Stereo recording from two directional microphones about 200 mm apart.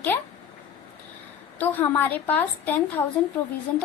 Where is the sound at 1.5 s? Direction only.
10° left (ahead or behind).